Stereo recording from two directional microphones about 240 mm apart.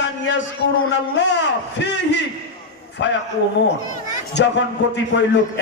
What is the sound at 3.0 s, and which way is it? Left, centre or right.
Speech, left.